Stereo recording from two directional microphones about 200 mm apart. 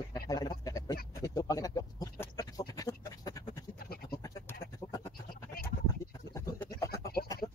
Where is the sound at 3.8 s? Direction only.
50° left (ahead or behind).